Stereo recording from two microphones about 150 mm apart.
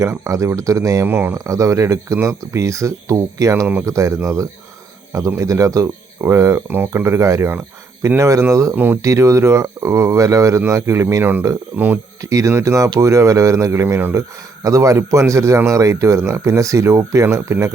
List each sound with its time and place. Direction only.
0.0 s speech: 20° right (ahead or behind)